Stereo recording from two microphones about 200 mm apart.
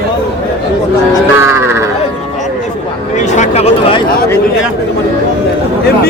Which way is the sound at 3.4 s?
30° left (ahead or behind).